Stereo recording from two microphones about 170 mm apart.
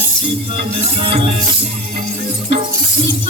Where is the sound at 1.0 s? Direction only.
35° right (ahead or behind).